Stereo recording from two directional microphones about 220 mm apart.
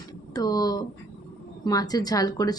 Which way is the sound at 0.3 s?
15° left (ahead or behind).